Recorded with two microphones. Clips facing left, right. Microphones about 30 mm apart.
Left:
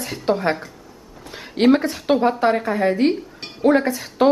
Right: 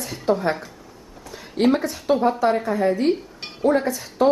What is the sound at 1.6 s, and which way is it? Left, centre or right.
A woman's voice, left.